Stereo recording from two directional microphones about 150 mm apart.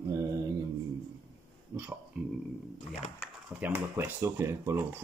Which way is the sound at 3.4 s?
10° right (ahead or behind).